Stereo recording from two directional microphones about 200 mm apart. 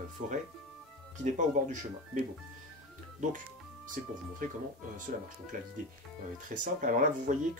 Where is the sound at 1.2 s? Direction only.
40° right (ahead or behind).